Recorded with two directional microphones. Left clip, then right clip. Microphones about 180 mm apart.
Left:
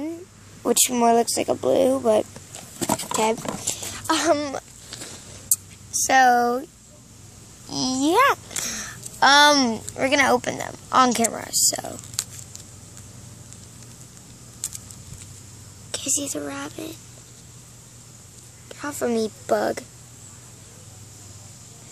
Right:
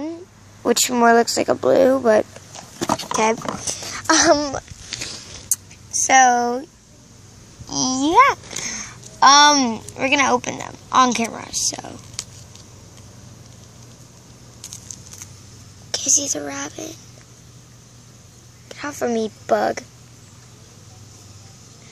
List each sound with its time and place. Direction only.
0.6 s speech: centre (ahead or behind)
2.5 s a sound: 5° left (ahead or behind)
4.1 s a sound: 20° right (ahead or behind); by 6.6 s centre (ahead or behind)
7.7 s speech: centre (ahead or behind)
15.9 s speech: 5° right (ahead or behind)
18.7 s speech: 5° right (ahead or behind)